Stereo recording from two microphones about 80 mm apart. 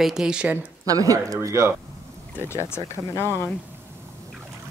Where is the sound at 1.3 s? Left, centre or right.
Right.